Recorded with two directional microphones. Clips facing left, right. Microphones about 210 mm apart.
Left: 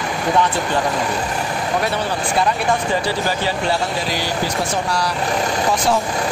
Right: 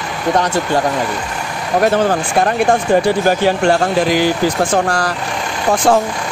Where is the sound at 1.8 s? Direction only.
50° right (ahead or behind).